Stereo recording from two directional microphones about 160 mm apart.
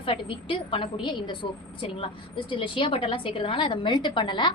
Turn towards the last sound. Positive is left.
turn(degrees=30)  # may be behind; listen again after turning